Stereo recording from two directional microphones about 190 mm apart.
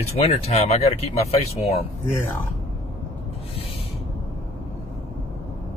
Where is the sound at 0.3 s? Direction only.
35° left (ahead or behind).